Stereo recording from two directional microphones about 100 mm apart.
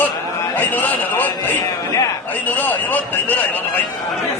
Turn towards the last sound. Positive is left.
turn(degrees=15)  # may be behind; listen again after turning